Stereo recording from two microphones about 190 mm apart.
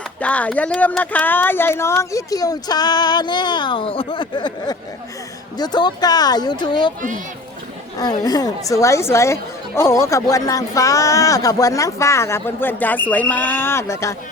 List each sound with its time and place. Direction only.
0.2 s speech: 5° left (ahead or behind); by 6.9 s 25° left (ahead or behind)
8.2 s speech: 20° left (ahead or behind)